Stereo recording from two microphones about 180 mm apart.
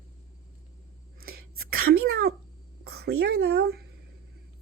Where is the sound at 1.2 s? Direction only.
55° right (ahead or behind).